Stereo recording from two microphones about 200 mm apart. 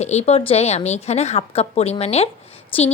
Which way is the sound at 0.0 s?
35° left (ahead or behind).